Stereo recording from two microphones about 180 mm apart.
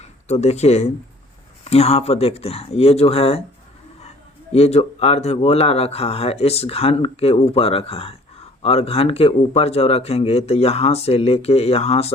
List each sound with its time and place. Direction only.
0.0 s a man's voice: 35° left (ahead or behind)
4.5 s a man's voice: 35° left (ahead or behind)